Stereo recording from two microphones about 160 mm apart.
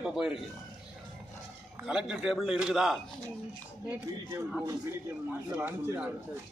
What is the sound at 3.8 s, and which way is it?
Speech, 15° right (ahead or behind).